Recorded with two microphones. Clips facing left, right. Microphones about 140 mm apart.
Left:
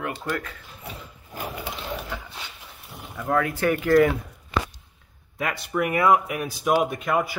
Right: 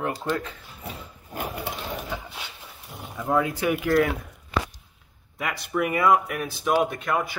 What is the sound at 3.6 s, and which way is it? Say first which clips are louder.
Speech: left 5 dB; 5° right (ahead or behind).